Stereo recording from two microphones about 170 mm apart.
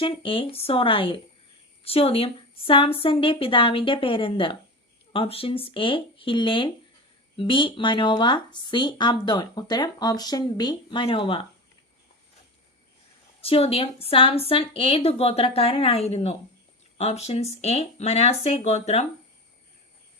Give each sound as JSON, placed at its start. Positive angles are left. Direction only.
{"t": 0.0, "sound": "a woman's voice", "side_deg": 30}
{"t": 13.4, "sound": "a woman's voice", "side_deg": 35}